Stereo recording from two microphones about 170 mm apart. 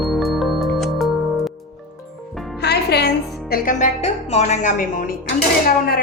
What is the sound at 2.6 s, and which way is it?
Music, 75° left (ahead or behind).